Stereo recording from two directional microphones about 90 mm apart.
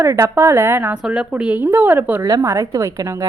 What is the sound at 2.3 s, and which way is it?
Speech, 35° right (ahead or behind).